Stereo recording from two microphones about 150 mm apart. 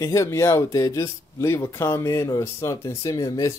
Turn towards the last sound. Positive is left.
turn(degrees=20)  # may be behind; listen again after turning